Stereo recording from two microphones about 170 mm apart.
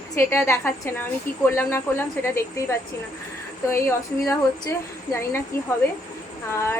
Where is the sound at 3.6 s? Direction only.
15° left (ahead or behind).